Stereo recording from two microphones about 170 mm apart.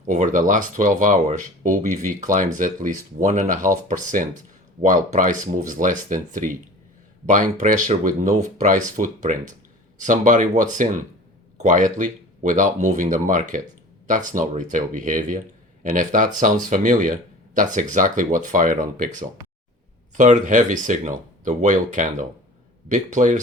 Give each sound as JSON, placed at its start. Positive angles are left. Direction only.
{"t": 0.0, "sound": "speech", "side_deg": -45}
{"t": 7.6, "sound": "speech", "side_deg": -50}
{"t": 20.1, "sound": "speech", "side_deg": -45}